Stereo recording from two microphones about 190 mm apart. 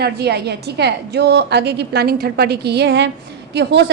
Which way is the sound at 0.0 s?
60° right (ahead or behind).